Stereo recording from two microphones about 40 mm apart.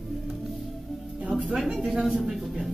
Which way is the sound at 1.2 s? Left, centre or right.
Right.